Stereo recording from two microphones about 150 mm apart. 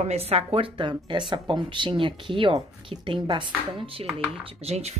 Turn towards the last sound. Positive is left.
turn(degrees=-45)  # may be behind; listen again after turning